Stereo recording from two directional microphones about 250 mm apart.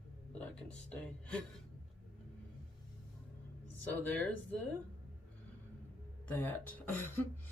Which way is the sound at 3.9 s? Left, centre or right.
Centre.